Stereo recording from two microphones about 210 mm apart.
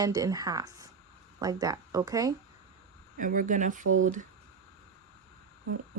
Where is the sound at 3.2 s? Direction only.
40° right (ahead or behind).